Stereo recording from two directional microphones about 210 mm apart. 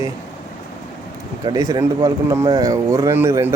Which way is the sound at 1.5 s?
20° right (ahead or behind).